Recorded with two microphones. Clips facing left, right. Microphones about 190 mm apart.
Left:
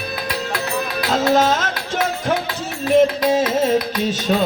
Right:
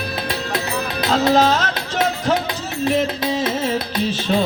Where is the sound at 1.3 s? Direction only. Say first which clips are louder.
Even; 50° left (ahead or behind).